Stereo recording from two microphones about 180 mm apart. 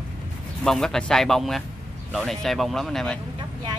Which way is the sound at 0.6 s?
Centre (ahead or behind).